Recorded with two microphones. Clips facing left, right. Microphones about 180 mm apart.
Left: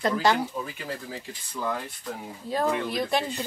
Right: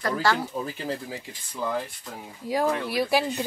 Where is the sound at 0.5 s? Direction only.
35° right (ahead or behind).